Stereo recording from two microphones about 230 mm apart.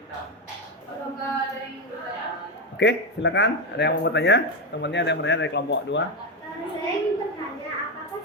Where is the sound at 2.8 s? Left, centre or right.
Left.